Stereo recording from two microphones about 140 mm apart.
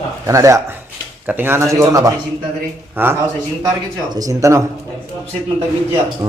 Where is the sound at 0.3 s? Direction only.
20° right (ahead or behind).